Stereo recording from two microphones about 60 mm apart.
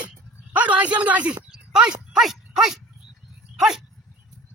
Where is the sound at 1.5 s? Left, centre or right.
Centre.